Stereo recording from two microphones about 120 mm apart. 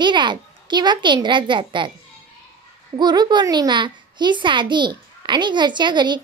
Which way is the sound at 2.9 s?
35° right (ahead or behind).